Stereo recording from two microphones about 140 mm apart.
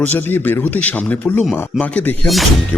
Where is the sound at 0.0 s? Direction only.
15° left (ahead or behind).